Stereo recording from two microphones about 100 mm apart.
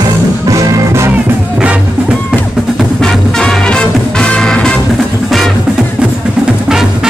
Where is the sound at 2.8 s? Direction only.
5° left (ahead or behind).